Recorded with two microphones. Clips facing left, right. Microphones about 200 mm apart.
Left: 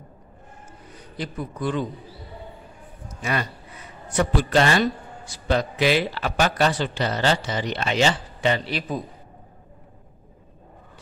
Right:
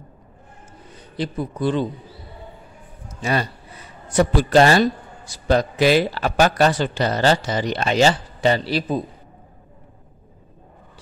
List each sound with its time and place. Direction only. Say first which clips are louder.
1.1 s a man's voice: right 5 dB; 30° right (ahead or behind)
3.1 s a sound: right 4 dB; 30° right (ahead or behind)
4.1 s a man's voice: right 5 dB; 35° right (ahead or behind)